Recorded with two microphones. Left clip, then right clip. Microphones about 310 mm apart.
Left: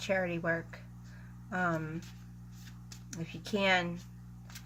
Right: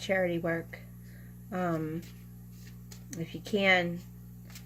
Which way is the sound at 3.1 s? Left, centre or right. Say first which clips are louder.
Right 4 dB; left.